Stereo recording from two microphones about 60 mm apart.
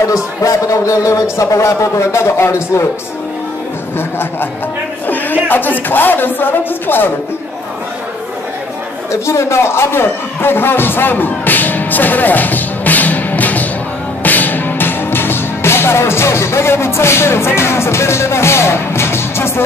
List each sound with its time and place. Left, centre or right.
0.1 s speech: left
5.0 s a sound: left
5.5 s speech: left
9.1 s speech: left
14.2 s music: left